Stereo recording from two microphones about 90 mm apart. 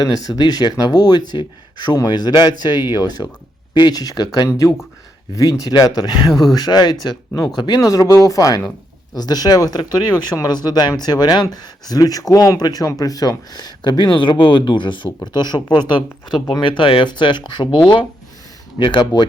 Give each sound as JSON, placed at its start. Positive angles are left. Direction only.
{"t": 0.0, "sound": "speech", "side_deg": 45}
{"t": 7.9, "sound": "speech", "side_deg": 40}
{"t": 15.3, "sound": "speech", "side_deg": 50}
{"t": 18.8, "sound": "speech", "side_deg": 60}